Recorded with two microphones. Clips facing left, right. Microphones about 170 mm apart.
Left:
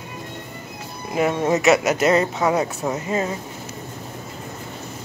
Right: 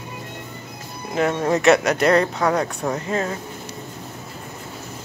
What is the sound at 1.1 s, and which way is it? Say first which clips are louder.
Speech: even; 10° left (ahead or behind).